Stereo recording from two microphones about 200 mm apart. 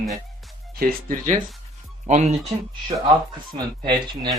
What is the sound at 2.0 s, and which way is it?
Speech, 35° right (ahead or behind).